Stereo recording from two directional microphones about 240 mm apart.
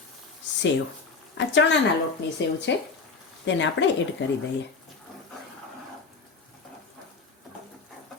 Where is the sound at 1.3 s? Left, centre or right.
Left.